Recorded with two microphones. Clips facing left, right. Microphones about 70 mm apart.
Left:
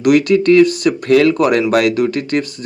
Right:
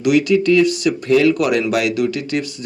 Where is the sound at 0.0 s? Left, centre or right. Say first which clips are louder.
Left 3 dB; left.